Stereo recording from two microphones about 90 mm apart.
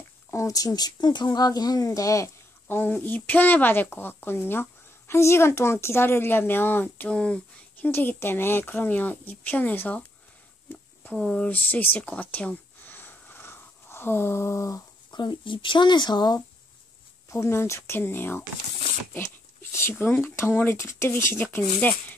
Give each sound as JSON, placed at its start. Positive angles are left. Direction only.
{"t": 0.3, "sound": "speech", "side_deg": 35}
{"t": 2.7, "sound": "speech", "side_deg": 20}
{"t": 7.9, "sound": "speech", "side_deg": 25}
{"t": 11.1, "sound": "speech", "side_deg": 10}
{"t": 15.0, "sound": "speech", "side_deg": 60}
{"t": 17.3, "sound": "speech", "side_deg": 30}